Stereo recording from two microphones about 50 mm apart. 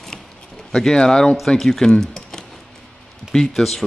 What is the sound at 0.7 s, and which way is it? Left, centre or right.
Speech, centre.